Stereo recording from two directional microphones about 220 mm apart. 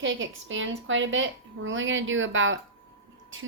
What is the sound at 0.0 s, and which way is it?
Speech, 60° right (ahead or behind).